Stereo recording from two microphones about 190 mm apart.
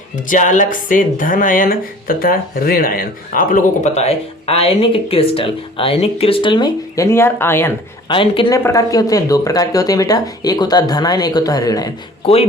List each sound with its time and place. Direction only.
0.3 s speech: 40° left (ahead or behind); by 7.7 s 10° left (ahead or behind)
8.0 s speech: 25° left (ahead or behind)
12.2 s speech: 30° left (ahead or behind)